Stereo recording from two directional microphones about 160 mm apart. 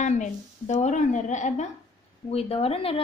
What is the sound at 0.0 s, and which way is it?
A woman's voice, 50° left (ahead or behind).